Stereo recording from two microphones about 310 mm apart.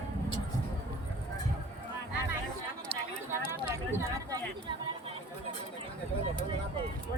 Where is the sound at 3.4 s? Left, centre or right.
Centre.